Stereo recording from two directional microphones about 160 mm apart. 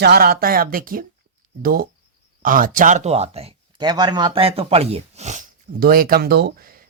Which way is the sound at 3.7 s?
25° right (ahead or behind).